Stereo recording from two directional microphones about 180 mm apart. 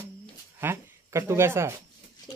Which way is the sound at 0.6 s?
15° right (ahead or behind).